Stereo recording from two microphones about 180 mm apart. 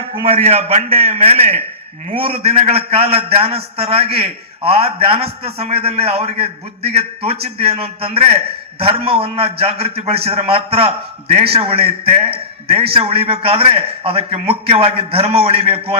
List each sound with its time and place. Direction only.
0.1 s a man's voice: 30° right (ahead or behind)